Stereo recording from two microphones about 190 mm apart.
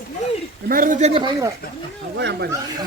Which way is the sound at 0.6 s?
45° right (ahead or behind).